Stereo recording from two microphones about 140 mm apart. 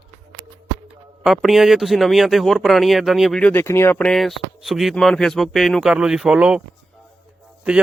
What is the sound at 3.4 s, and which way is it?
Speech, 15° left (ahead or behind).